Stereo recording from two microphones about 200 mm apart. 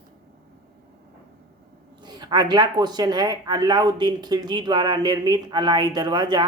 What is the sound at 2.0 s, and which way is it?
Speech, 20° right (ahead or behind).